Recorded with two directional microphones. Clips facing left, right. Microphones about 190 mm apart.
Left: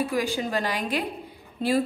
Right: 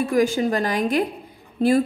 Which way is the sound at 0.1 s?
45° right (ahead or behind).